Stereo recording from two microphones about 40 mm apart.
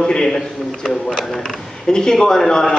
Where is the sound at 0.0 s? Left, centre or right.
Centre.